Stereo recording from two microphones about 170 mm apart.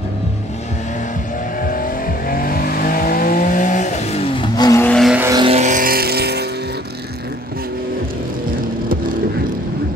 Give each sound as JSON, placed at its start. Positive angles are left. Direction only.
{"t": 1.6, "sound": "vehicle", "side_deg": 55}
{"t": 4.8, "sound": "vehicle", "side_deg": 5}
{"t": 5.3, "sound": "vehicle", "side_deg": -30}
{"t": 5.6, "sound": "vehicle", "side_deg": -50}